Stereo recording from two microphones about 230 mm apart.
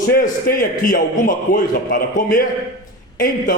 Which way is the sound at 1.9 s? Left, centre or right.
Left.